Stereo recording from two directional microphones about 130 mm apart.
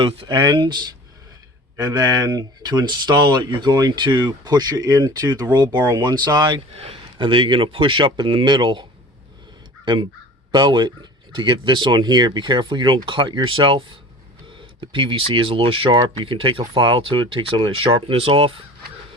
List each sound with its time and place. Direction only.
0.0 s speech: 35° right (ahead or behind)
6.7 s speech: 45° right (ahead or behind)
9.8 s crow: 35° right (ahead or behind)
10.5 s speech: 35° right (ahead or behind)